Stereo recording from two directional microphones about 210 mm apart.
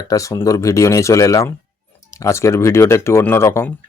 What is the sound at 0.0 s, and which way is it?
Speech, 15° left (ahead or behind).